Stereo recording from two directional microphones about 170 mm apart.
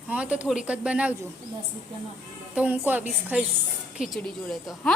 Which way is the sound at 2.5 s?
10° right (ahead or behind).